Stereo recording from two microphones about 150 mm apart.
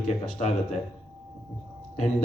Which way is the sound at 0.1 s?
50° left (ahead or behind).